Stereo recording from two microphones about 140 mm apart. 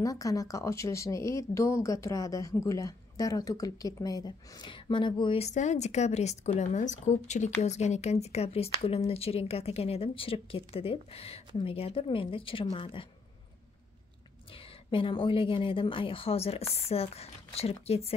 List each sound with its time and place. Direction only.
0.0 s speech: 25° left (ahead or behind)
5.5 s speech: 55° left (ahead or behind); by 13.0 s 40° left (ahead or behind)
14.5 s a woman's voice: 40° left (ahead or behind)